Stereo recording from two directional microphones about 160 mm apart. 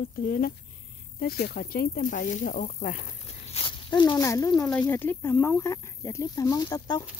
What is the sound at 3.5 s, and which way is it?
Speech, 30° left (ahead or behind).